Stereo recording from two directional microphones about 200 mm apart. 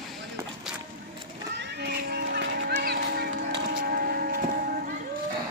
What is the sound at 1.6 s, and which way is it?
Run, 55° right (ahead or behind).